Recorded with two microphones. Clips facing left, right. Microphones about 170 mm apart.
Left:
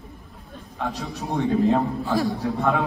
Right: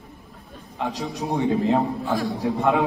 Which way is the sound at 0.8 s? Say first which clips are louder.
Right 2 dB; 15° right (ahead or behind).